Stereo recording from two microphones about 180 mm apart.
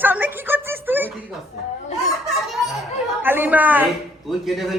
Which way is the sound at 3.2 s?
10° right (ahead or behind).